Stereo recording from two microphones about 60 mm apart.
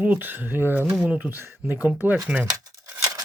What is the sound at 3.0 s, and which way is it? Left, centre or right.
Tearing, right.